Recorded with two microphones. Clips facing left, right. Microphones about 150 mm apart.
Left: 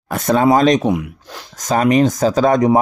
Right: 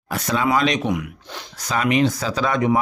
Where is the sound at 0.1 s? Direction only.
50° left (ahead or behind).